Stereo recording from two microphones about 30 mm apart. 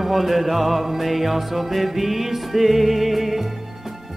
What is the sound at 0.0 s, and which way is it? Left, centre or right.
Music, centre.